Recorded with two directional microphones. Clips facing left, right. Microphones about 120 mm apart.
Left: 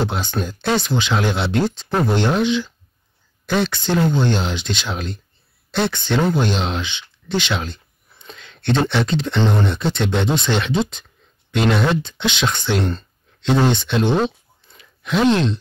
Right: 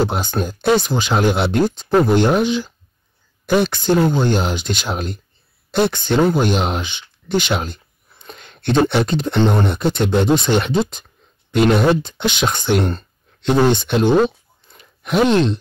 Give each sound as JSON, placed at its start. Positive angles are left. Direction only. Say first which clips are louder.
{"t": 0.0, "sound": "speech", "louder": "right 3 dB", "side_deg": -40}
{"t": 14.7, "sound": "groan", "louder": "right 2 dB", "side_deg": -50}